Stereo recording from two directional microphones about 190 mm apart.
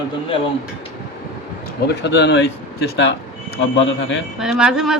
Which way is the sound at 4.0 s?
70° left (ahead or behind).